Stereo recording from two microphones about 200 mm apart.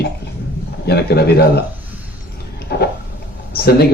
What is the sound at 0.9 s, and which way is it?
Speech, 55° left (ahead or behind).